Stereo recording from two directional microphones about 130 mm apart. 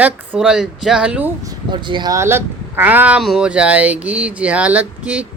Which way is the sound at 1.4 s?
35° right (ahead or behind).